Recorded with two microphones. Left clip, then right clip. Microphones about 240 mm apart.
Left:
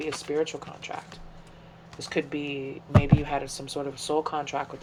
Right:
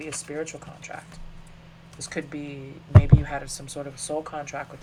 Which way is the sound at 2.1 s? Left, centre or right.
Left.